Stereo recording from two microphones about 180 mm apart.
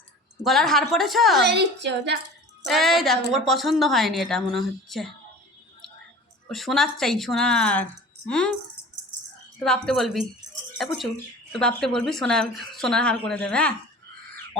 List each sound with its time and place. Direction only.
0.4 s speech: centre (ahead or behind)
1.5 s a woman's voice: 70° right (ahead or behind)
2.6 s speech: centre (ahead or behind)
6.5 s speech: centre (ahead or behind)
9.6 s speech: 5° left (ahead or behind)